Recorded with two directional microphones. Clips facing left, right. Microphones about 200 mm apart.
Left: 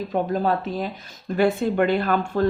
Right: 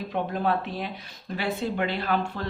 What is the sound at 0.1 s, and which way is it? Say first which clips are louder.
Speech: left 4 dB; 40° left (ahead or behind).